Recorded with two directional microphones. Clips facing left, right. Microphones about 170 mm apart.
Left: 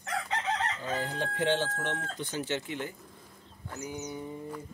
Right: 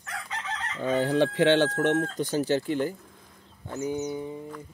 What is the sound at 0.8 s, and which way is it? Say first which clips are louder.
Speech: right 10 dB; 70° right (ahead or behind).